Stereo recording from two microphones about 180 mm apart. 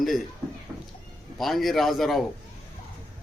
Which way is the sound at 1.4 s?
Centre (ahead or behind).